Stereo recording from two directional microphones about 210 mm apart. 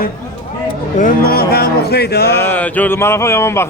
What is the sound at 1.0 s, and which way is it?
Music, 45° left (ahead or behind).